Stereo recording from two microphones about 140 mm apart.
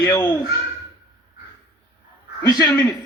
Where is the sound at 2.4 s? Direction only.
30° left (ahead or behind).